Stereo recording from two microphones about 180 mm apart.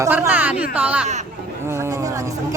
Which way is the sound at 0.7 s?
10° right (ahead or behind).